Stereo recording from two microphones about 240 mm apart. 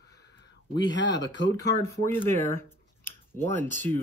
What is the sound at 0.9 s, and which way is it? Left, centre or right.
Speech, left.